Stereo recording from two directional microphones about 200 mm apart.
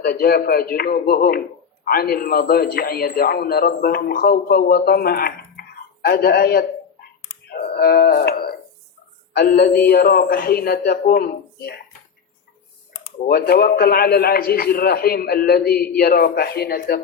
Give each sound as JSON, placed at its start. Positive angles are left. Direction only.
{"t": 0.0, "sound": "a man's voice", "side_deg": 50}
{"t": 7.5, "sound": "music", "side_deg": 50}
{"t": 9.3, "sound": "a man's voice", "side_deg": 50}
{"t": 13.2, "sound": "a man's voice", "side_deg": 50}